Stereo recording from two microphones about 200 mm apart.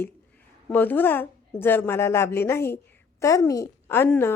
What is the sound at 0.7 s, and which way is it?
A woman's voice, 10° left (ahead or behind).